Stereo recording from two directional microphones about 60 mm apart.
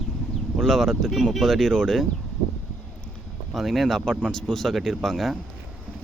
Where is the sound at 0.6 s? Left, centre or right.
Centre.